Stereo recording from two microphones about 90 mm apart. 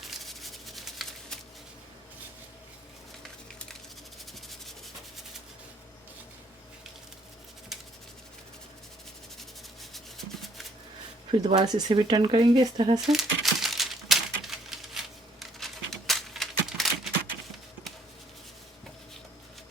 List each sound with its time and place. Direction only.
0.3 s rub: centre (ahead or behind)
7.7 s a sound: 5° right (ahead or behind)
9.9 s rub: centre (ahead or behind)
11.3 s speech: 65° right (ahead or behind)
11.6 s speech: 50° right (ahead or behind)
13.1 s crumpling: 5° right (ahead or behind)